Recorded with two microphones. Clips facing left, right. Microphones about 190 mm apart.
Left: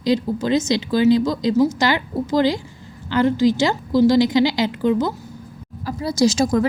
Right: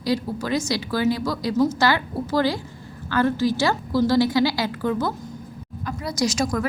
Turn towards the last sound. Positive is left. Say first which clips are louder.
# left 6 dB
turn(degrees=25)  # may be behind; listen again after turning